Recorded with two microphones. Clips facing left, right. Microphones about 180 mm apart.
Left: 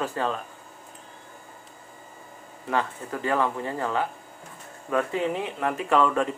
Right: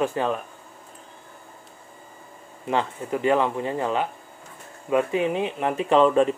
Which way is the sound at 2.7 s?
20° right (ahead or behind).